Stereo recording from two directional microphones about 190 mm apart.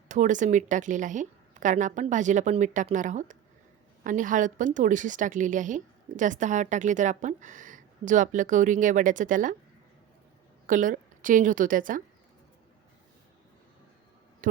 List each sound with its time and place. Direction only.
0.1 s a woman's voice: 40° right (ahead or behind)
10.7 s a woman's voice: 45° right (ahead or behind)